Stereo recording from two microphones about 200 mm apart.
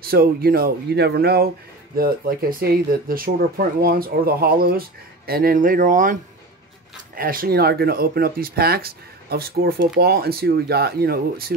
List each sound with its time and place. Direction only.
0.0 s speech: 50° right (ahead or behind)
7.2 s speech: 45° right (ahead or behind)